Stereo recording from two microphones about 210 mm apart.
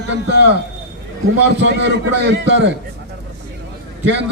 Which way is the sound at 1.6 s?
55° right (ahead or behind).